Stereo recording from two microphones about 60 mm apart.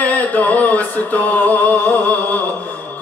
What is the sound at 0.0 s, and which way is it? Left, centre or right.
Music, left.